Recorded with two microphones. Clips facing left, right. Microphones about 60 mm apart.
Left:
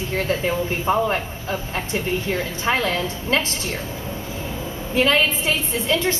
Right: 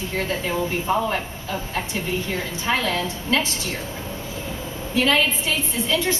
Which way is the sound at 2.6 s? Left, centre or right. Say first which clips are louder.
Left 1 dB; left.